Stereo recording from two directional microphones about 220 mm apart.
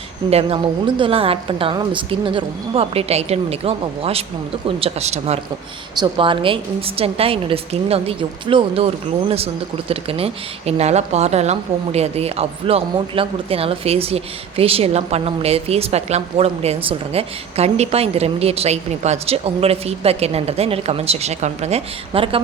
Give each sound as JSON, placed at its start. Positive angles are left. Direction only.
{"t": 0.3, "sound": "speech", "side_deg": -25}
{"t": 9.9, "sound": "speech", "side_deg": -25}